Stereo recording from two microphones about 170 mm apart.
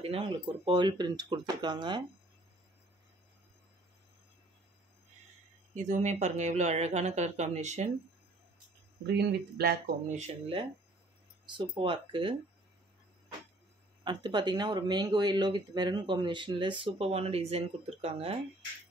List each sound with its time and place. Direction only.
0.0 s speech: 35° right (ahead or behind)
5.8 s speech: 45° right (ahead or behind)
9.0 s speech: 70° right (ahead or behind)
10.0 s speech: 40° right (ahead or behind)
14.0 s speech: 25° right (ahead or behind)